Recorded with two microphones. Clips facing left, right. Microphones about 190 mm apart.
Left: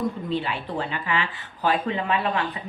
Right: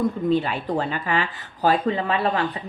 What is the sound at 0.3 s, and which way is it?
Speech, 45° right (ahead or behind).